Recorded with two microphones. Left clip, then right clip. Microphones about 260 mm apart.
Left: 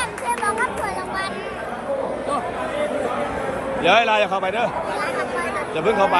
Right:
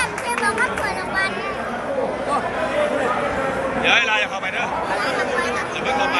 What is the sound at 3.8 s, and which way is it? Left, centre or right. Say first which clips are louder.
A man's voice: left 2 dB; centre.